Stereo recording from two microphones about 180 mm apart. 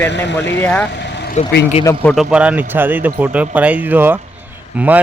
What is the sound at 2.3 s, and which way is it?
Speech, 5° right (ahead or behind).